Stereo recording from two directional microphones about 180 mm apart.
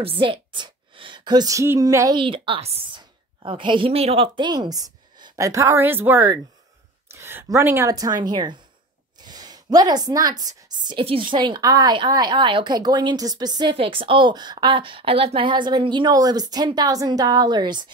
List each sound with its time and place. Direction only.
0.0 s a woman's voice: 30° right (ahead or behind)
2.1 s a woman's voice: 30° right (ahead or behind)